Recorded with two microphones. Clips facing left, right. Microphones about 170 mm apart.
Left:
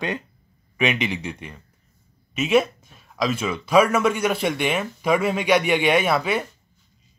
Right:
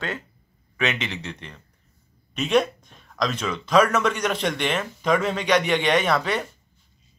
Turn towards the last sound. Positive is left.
turn(degrees=10)  # may be behind; listen again after turning